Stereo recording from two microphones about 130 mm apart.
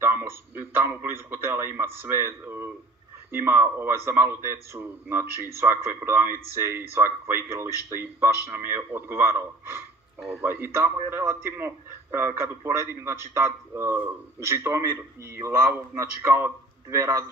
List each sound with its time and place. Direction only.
0.0 s a man's voice: 15° right (ahead or behind)
10.4 s a man's voice: 15° right (ahead or behind)